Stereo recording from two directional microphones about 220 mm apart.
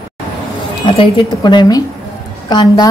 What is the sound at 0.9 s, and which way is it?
A woman's voice, 20° left (ahead or behind).